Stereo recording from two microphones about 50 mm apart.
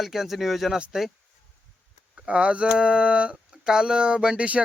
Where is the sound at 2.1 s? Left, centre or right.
Right.